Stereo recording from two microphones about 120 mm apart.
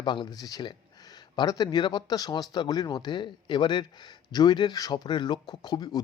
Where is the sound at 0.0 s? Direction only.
40° left (ahead or behind).